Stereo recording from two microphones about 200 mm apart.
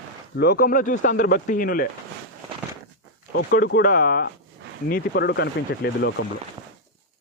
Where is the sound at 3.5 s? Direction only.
45° left (ahead or behind).